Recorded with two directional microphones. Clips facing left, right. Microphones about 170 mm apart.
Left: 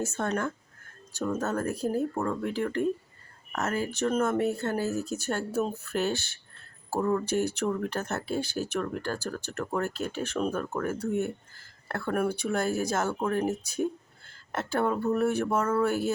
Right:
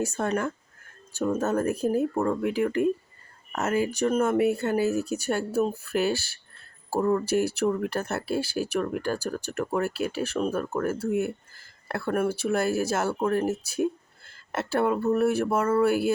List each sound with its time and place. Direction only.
0.0 s speech: 10° right (ahead or behind)